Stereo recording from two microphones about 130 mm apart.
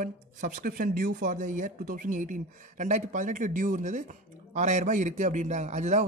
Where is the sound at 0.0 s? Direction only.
90° right.